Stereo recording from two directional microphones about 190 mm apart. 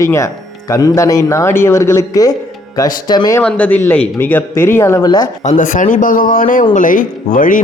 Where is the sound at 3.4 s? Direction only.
5° left (ahead or behind).